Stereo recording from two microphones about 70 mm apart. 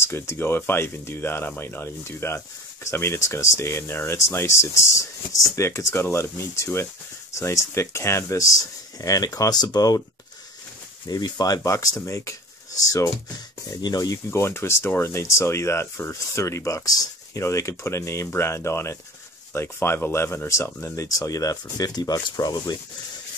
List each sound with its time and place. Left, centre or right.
0.0 s speech: left
11.1 s speech: left
14.3 s speech: left
17.4 s speech: left